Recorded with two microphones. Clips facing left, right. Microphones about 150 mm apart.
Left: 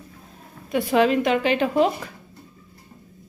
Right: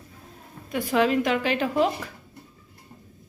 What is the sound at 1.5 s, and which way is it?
Speech, 25° left (ahead or behind).